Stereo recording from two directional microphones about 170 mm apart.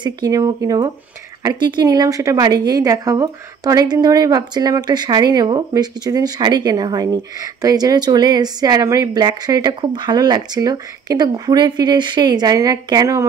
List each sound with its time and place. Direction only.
0.0 s a woman's voice: 20° right (ahead or behind)